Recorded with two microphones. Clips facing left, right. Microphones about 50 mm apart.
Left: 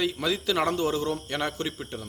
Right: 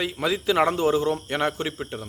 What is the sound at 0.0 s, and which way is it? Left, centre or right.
A man's voice, centre.